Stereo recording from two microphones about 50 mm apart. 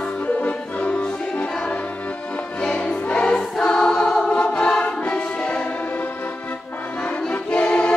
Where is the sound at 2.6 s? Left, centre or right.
Centre.